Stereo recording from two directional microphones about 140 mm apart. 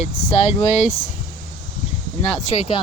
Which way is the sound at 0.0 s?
50° left (ahead or behind).